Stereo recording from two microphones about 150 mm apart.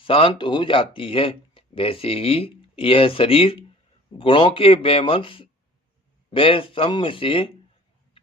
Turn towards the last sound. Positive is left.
turn(degrees=35)  # may be behind; listen again after turning